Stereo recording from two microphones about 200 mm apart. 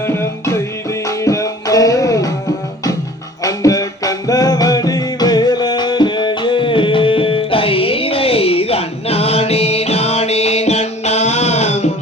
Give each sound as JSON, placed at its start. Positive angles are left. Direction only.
{"t": 0.0, "sound": "music", "side_deg": 10}
{"t": 3.4, "sound": "music", "side_deg": 15}